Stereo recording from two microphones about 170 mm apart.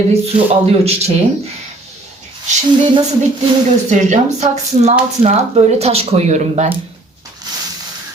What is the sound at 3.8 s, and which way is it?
Speech, 40° right (ahead or behind).